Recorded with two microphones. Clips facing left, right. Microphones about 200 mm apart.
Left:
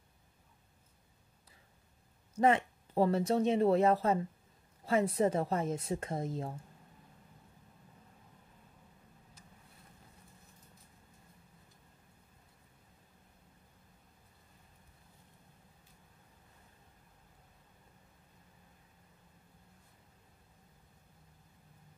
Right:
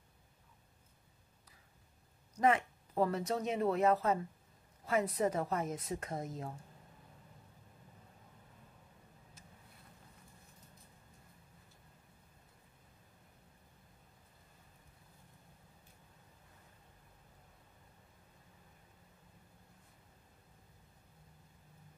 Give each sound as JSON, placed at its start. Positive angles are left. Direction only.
{"t": 2.4, "sound": "speech", "side_deg": 30}